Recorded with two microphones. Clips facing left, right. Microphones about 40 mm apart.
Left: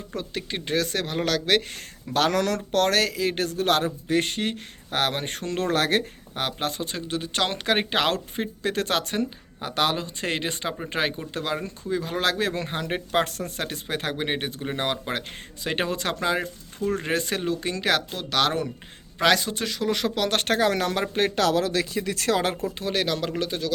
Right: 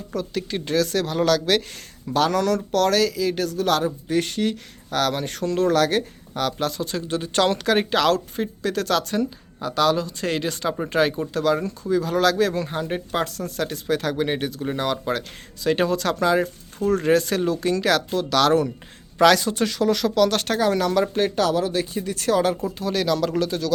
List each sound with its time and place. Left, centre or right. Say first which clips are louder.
0.1 s speech: right 5 dB; left
2.1 s speech: right 3 dB; left
7.1 s speech: right 6 dB; centre
7.5 s speech: right 3 dB; left
12.6 s speech: right 2 dB; left; by 19.9 s centre
19.9 s speech: right 4 dB; left
21.2 s speech: right 1 dB; left
22.8 s speech: right 4 dB; left